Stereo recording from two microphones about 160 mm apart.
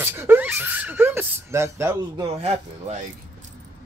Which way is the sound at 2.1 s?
40° right (ahead or behind).